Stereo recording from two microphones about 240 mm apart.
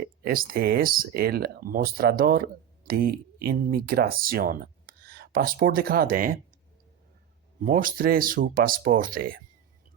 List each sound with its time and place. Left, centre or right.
0.3 s speech: right
7.6 s speech: right